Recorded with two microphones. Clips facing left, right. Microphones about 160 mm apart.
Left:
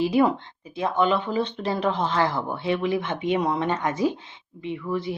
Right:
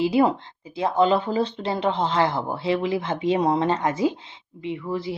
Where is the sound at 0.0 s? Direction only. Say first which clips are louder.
Right 1 dB; 25° right (ahead or behind).